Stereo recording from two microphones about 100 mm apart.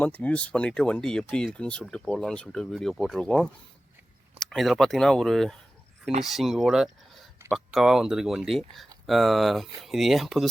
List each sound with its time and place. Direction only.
0.0 s speech: 15° left (ahead or behind); by 10.5 s centre (ahead or behind)